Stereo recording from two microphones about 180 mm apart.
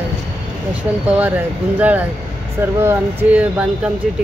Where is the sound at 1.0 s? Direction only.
5° right (ahead or behind).